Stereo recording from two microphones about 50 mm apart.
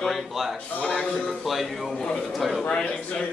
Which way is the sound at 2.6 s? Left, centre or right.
Left.